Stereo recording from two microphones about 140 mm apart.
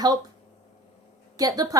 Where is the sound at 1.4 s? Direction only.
25° right (ahead or behind).